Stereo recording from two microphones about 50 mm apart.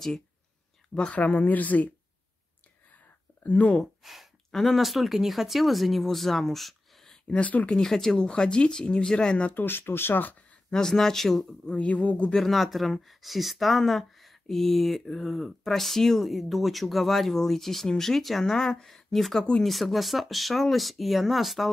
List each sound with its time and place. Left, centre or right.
1.1 s speech: left
3.4 s speech: left
4.0 s speech: centre
7.3 s speech: left
7.7 s speech: centre
9.5 s speech: left
10.7 s speech: centre
11.7 s speech: left
12.4 s speech: centre